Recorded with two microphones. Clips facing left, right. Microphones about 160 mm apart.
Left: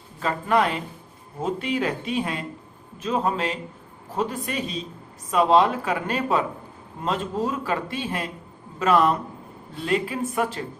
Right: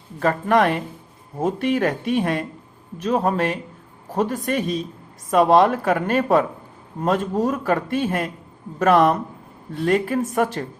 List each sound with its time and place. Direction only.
0.2 s a man's voice: 50° right (ahead or behind)